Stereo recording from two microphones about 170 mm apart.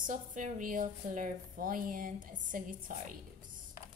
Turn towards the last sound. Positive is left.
turn(degrees=-50)  # may be behind; listen again after turning